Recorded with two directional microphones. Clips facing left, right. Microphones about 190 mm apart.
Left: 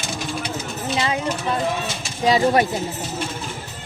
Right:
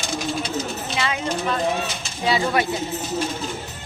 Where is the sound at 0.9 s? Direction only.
25° left (ahead or behind).